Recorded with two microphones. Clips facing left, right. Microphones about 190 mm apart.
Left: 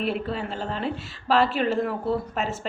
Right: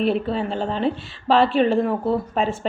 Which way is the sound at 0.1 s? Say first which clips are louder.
Right 6 dB; 25° right (ahead or behind).